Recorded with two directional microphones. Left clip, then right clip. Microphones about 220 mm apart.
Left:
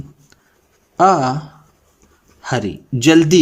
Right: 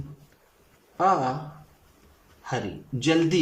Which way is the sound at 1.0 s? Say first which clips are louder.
Left 10 dB; 50° left (ahead or behind).